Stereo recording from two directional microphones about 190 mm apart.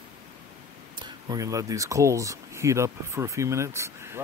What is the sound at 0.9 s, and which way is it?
Speech, 25° right (ahead or behind).